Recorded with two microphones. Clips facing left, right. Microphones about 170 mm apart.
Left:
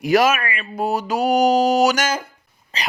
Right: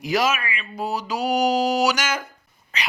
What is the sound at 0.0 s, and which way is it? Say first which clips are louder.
Speech: left 6 dB; 55° left (ahead or behind).